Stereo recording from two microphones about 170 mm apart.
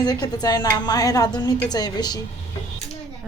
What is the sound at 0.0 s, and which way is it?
A woman's voice, 25° left (ahead or behind).